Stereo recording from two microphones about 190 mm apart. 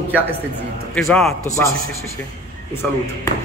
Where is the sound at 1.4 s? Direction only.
15° left (ahead or behind).